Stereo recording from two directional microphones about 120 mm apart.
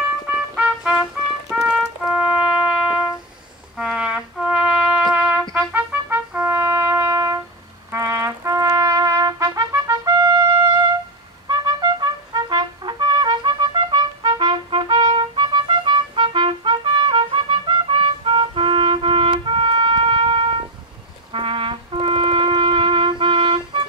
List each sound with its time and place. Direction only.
0.6 s trumpet: 5° right (ahead or behind)
1.5 s music: 5° right (ahead or behind)
3.7 s trumpet: 5° right (ahead or behind); by 20.6 s 50° right (ahead or behind)
21.3 s music: 45° right (ahead or behind)